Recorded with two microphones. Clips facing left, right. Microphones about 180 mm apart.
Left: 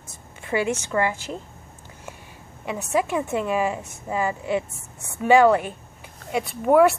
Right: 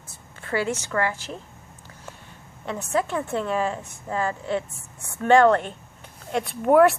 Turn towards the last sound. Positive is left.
turn(degrees=0)  # may be behind; listen again after turning